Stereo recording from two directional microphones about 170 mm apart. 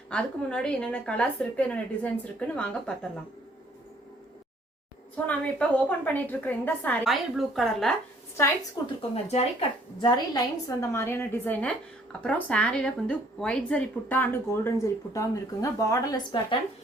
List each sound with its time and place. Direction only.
0.1 s a woman's voice: 5° left (ahead or behind)
5.2 s a woman's voice: 10° left (ahead or behind)
9.0 s speech: 35° left (ahead or behind)
10.0 s a woman's voice: 25° left (ahead or behind)